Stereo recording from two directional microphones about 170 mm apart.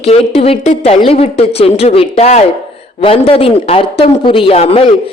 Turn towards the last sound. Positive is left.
turn(degrees=35)  # may be behind; listen again after turning